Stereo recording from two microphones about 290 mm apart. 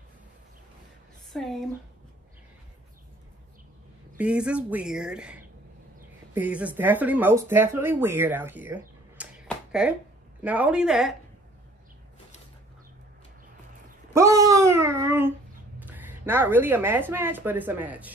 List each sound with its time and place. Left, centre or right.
1.3 s speech: centre
4.2 s a woman's voice: centre
14.1 s a sound: centre
15.8 s a woman's voice: centre